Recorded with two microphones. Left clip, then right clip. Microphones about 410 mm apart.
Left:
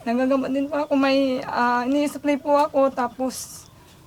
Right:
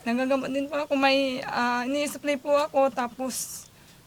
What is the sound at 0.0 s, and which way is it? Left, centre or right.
Speech, right.